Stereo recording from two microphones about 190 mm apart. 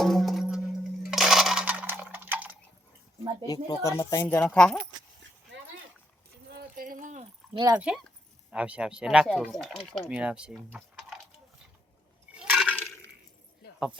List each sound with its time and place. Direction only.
0.0 s music: centre (ahead or behind)
1.1 s coin: centre (ahead or behind)
3.4 s speech: 20° left (ahead or behind)
5.5 s splash: 70° right (ahead or behind)
6.5 s a sound: 55° right (ahead or behind)
7.5 s speech: 20° right (ahead or behind)
7.8 s speech: centre (ahead or behind)
12.3 s liquid: 5° right (ahead or behind)
12.7 s a sound: 10° left (ahead or behind)